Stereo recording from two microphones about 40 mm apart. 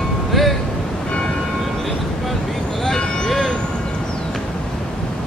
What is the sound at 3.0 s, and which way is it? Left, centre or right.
Vehicle, left.